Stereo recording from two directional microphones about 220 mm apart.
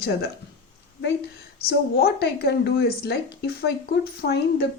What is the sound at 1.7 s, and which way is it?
Speech, 45° left (ahead or behind).